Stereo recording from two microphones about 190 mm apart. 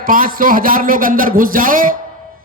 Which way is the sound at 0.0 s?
50° right (ahead or behind).